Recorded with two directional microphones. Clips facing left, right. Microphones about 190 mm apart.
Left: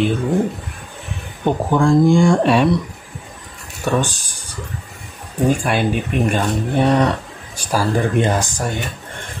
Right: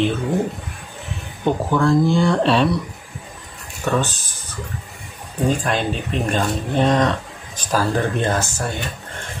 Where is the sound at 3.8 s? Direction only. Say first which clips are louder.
Left 2 dB; 15° left (ahead or behind).